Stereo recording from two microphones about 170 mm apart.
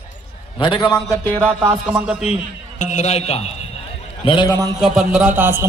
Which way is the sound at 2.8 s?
45° left (ahead or behind).